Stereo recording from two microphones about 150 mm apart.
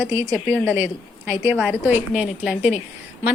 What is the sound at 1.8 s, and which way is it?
Speech, 15° right (ahead or behind).